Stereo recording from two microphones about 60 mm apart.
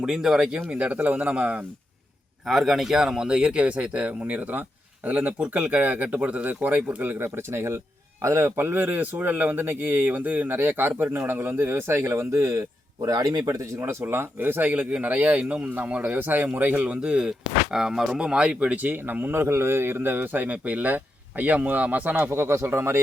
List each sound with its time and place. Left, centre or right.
0.0 s speech: centre
2.5 s a man's voice: centre; by 8.5 s right
8.5 s speech: right
13.0 s speech: right
19.3 s speech: right
22.3 s speech: right